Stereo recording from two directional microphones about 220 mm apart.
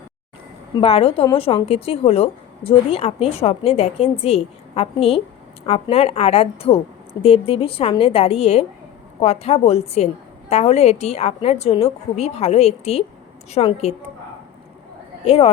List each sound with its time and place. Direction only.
0.8 s a woman's voice: 25° left (ahead or behind)
15.2 s speech: 25° left (ahead or behind)